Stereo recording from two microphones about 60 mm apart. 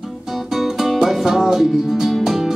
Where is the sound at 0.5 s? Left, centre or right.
Centre.